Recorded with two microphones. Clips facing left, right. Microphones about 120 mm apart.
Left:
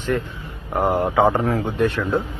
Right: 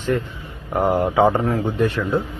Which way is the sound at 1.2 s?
15° left (ahead or behind).